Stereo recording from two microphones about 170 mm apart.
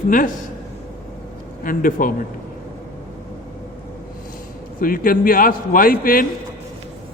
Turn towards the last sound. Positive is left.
turn(degrees=55)  # may be behind; listen again after turning